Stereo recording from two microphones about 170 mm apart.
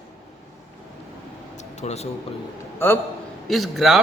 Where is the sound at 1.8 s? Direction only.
40° left (ahead or behind).